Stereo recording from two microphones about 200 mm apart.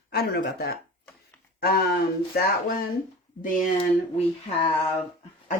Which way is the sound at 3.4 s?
40° left (ahead or behind).